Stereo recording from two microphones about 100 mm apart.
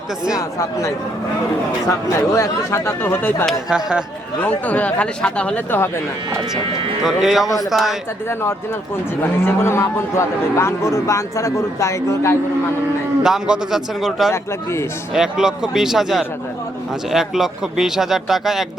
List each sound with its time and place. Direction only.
0.3 s speech: 30° left (ahead or behind)
3.7 s speech: 5° right (ahead or behind)
4.4 s speech: 15° left (ahead or behind)
7.0 s speech: 5° right (ahead or behind)
8.3 s speech: 25° left (ahead or behind)
13.2 s speech: 5° right (ahead or behind)